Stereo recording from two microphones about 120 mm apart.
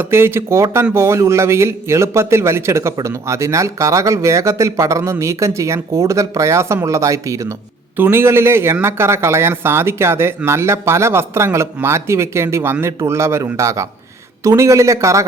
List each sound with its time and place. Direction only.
0.0 s a man's voice: 20° right (ahead or behind)